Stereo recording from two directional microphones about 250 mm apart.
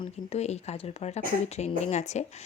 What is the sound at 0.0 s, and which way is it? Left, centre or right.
Speech, left.